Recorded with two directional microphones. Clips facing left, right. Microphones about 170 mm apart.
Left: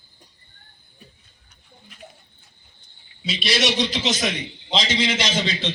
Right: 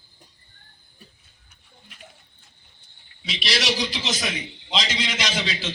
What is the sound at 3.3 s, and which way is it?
A man's voice, centre (ahead or behind).